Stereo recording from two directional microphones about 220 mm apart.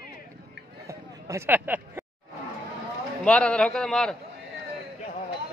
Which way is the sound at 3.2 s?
5° left (ahead or behind).